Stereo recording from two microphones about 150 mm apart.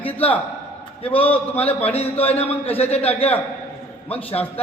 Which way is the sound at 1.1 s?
10° left (ahead or behind).